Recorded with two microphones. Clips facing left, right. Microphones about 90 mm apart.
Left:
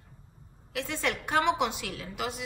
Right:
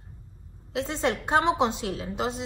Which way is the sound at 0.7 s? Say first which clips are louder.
Right 5 dB; 25° right (ahead or behind).